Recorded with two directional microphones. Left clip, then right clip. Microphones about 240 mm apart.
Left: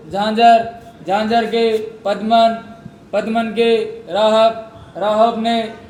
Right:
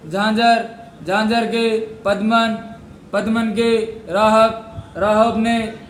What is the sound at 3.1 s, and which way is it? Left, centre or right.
A man's voice, centre.